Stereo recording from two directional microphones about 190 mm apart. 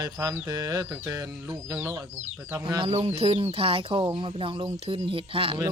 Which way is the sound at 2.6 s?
25° right (ahead or behind).